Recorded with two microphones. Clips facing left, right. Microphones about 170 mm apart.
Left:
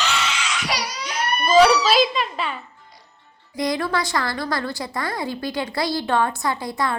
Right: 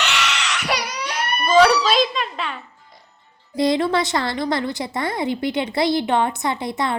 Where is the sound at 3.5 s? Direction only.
25° right (ahead or behind).